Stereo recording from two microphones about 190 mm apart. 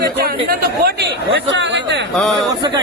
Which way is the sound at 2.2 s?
Centre (ahead or behind).